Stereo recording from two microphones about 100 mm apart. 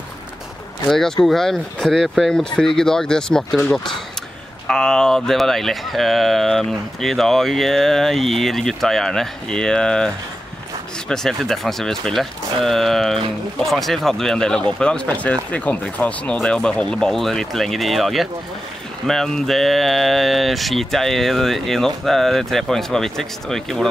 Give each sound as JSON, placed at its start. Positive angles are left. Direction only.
{"t": 0.8, "sound": "speech", "side_deg": 5}